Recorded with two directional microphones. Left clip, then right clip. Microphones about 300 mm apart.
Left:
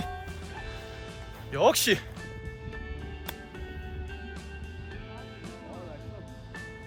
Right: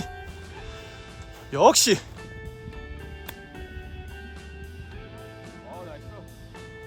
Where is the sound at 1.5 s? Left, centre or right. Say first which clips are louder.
Right 5 dB; centre.